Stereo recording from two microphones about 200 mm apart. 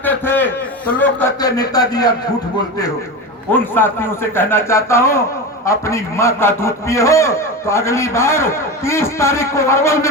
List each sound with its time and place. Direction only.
0.0 s a man's voice: 10° left (ahead or behind)
3.5 s a man's voice: 10° left (ahead or behind)